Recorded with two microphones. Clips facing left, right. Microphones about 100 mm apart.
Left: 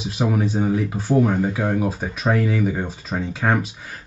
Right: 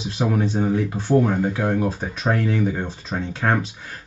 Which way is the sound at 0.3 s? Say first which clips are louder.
Even; 5° left (ahead or behind).